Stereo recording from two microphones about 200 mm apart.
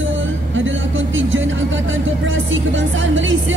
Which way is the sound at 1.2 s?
70° right (ahead or behind).